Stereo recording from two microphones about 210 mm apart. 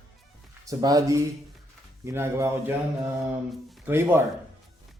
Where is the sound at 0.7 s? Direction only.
15° right (ahead or behind).